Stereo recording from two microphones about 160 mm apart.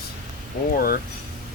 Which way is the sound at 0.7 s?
70° left (ahead or behind).